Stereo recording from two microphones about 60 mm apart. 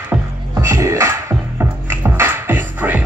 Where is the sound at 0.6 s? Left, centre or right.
Right.